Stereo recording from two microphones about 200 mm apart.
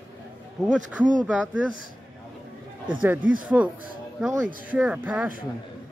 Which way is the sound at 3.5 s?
10° right (ahead or behind).